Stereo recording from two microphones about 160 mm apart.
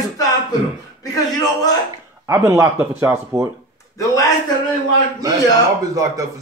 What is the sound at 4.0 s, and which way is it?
Speech, 20° left (ahead or behind).